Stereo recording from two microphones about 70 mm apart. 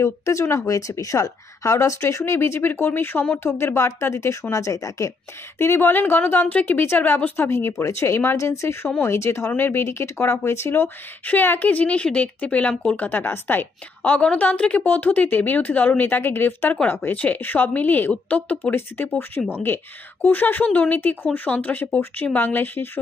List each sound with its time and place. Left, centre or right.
0.0 s speech: left
5.6 s a woman's voice: left
7.4 s a woman's voice: left